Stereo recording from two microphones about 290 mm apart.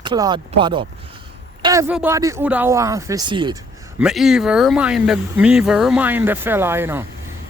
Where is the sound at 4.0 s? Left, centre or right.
Centre.